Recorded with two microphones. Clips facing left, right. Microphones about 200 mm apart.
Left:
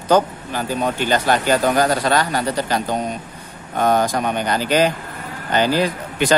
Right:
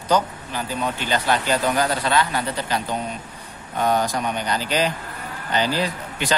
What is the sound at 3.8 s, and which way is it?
Speech, 50° left (ahead or behind).